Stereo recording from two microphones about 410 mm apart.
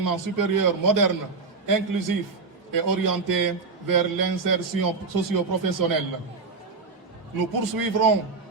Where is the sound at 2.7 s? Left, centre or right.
Right.